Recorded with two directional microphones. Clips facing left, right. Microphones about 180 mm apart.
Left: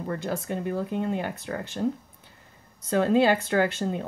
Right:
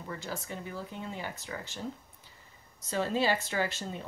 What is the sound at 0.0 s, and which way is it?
Speech, 55° left (ahead or behind).